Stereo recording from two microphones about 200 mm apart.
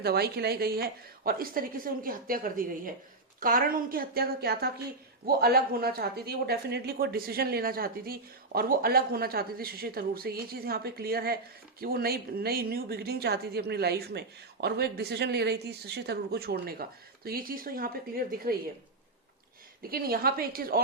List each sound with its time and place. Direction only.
0.0 s speech: 50° right (ahead or behind)
19.9 s speech: 50° right (ahead or behind)